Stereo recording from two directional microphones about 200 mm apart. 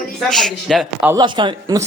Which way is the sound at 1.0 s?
20° right (ahead or behind).